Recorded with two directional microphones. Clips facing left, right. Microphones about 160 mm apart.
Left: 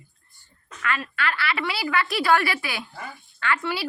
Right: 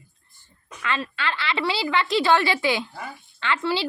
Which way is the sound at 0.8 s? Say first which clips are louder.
Even; 25° right (ahead or behind).